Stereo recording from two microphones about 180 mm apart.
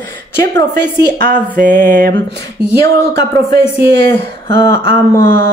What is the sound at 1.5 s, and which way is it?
Music, 45° right (ahead or behind).